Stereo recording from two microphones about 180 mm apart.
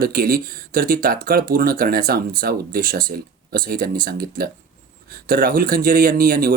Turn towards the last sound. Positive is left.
turn(degrees=-55)  # may be behind; listen again after turning